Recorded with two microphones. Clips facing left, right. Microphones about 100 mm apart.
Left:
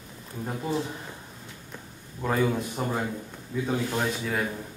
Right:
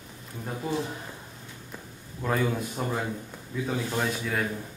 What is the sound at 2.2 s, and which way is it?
Speech, 5° left (ahead or behind).